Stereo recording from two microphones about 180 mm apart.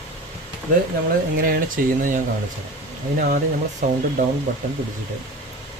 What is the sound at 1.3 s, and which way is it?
Speech, 55° right (ahead or behind).